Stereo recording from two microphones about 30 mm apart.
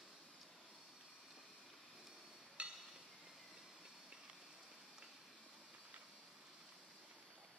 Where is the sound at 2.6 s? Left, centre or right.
Right.